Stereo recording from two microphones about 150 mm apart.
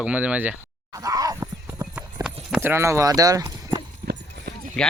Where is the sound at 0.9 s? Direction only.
25° right (ahead or behind).